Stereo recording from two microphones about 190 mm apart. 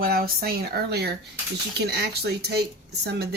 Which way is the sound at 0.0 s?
50° right (ahead or behind).